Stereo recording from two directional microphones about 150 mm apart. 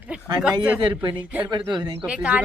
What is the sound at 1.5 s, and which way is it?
Speech, 30° right (ahead or behind).